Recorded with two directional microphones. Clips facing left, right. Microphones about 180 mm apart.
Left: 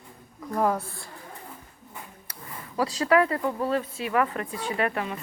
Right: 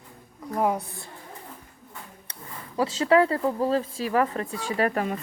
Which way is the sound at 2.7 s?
25° right (ahead or behind).